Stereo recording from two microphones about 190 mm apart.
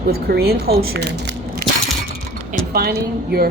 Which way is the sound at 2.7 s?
55° right (ahead or behind).